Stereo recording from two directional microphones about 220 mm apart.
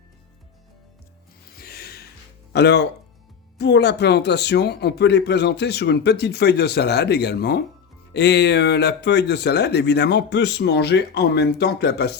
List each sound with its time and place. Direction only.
1.5 s music: 45° left (ahead or behind)
2.5 s speech: 50° left (ahead or behind)